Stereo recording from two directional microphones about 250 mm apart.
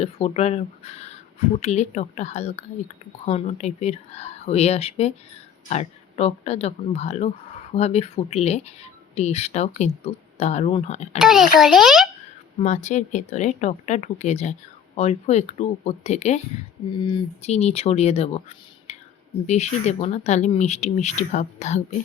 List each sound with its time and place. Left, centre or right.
0.0 s speech: left
11.2 s a child's voice: centre
12.5 s speech: left
17.4 s speech: left